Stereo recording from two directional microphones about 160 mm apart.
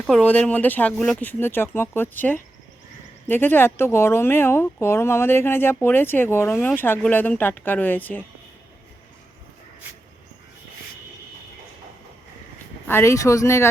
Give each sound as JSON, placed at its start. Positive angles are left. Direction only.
{"t": 0.1, "sound": "speech", "side_deg": 10}
{"t": 12.9, "sound": "speech", "side_deg": 15}